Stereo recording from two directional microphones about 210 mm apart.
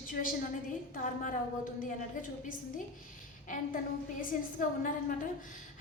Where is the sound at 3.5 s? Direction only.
40° left (ahead or behind).